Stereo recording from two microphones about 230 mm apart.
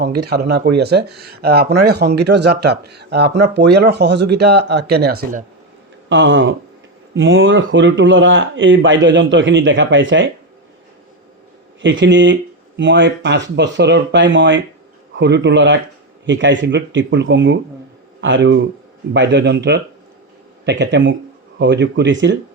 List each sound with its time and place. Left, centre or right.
0.3 s speech: right
6.1 s speech: right
11.8 s speech: right